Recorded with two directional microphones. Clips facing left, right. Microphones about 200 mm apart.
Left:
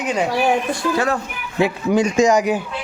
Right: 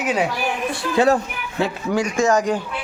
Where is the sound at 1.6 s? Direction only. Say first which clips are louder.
Left 4 dB; 15° left (ahead or behind).